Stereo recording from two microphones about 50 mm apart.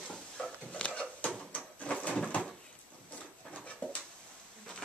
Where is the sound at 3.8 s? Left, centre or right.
Left.